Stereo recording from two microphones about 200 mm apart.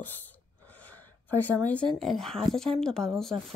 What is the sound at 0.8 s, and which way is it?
Speech, 10° left (ahead or behind).